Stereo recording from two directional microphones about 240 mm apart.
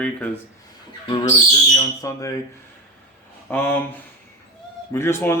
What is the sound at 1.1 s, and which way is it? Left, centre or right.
Speech, centre.